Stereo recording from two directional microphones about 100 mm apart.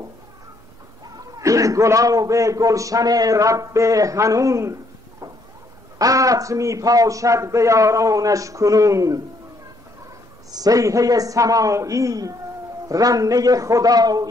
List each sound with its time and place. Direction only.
1.0 s a man's voice: 40° right (ahead or behind)
5.9 s a man's voice: 35° right (ahead or behind)
10.5 s a man's voice: 35° right (ahead or behind)